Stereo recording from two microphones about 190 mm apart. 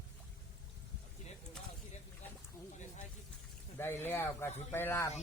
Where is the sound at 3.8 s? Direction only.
10° left (ahead or behind).